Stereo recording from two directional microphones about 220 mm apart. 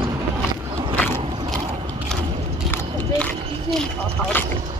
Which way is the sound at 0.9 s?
10° left (ahead or behind).